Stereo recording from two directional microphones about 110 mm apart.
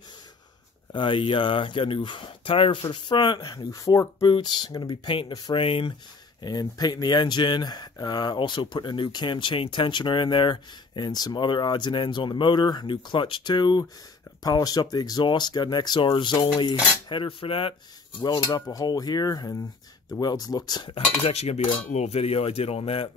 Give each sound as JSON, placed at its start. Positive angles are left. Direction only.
{"t": 0.9, "sound": "speech", "side_deg": 50}
{"t": 3.7, "sound": "speech", "side_deg": 30}
{"t": 6.4, "sound": "speech", "side_deg": 40}
{"t": 18.2, "sound": "speech", "side_deg": 35}
{"t": 20.9, "sound": "cutlery", "side_deg": 75}